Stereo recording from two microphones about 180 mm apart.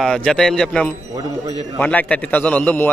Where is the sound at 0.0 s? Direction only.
5° left (ahead or behind).